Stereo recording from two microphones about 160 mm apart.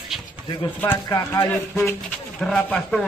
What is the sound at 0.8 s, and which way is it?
Speech, 15° left (ahead or behind).